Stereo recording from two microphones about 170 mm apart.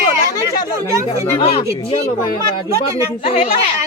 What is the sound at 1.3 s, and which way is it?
Speech, 35° left (ahead or behind).